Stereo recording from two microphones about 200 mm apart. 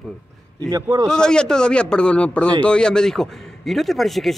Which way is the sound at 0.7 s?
15° right (ahead or behind).